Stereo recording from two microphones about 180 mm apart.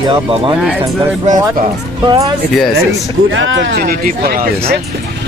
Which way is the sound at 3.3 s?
90° right.